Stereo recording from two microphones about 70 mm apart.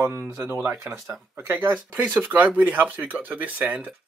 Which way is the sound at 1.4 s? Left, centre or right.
Right.